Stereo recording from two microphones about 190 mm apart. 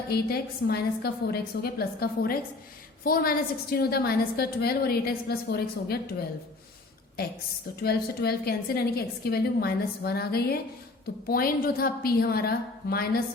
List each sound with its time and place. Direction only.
0.1 s a woman's voice: 55° left (ahead or behind)